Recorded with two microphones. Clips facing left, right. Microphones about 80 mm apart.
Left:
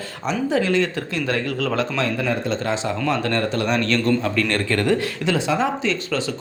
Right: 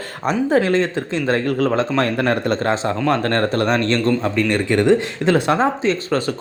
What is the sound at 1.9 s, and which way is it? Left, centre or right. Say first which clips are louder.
Speech: right 4 dB; right.